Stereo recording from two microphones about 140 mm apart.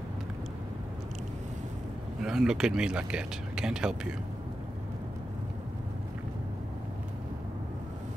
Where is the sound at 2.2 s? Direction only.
5° right (ahead or behind).